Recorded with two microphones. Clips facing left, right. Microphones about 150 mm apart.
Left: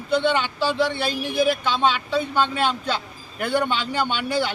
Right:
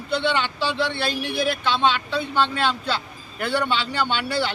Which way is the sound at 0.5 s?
45° left (ahead or behind).